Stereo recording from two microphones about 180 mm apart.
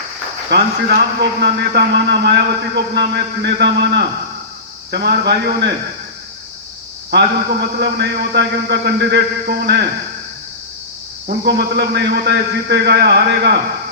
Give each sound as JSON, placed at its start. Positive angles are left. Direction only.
{"t": 0.5, "sound": "a man's voice", "side_deg": -70}
{"t": 7.1, "sound": "a man's voice", "side_deg": -70}
{"t": 11.3, "sound": "a man's voice", "side_deg": -65}